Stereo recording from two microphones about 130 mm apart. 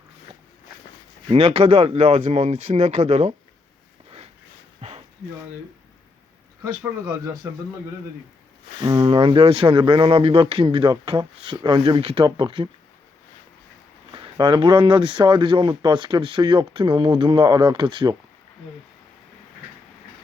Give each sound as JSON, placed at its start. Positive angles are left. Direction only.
{"t": 1.3, "sound": "speech", "side_deg": -50}
{"t": 4.8, "sound": "a sound", "side_deg": -50}
{"t": 8.8, "sound": "speech", "side_deg": -40}
{"t": 14.2, "sound": "speech", "side_deg": -40}